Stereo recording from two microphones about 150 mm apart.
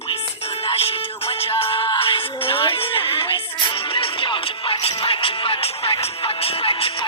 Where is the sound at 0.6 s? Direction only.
40° left (ahead or behind).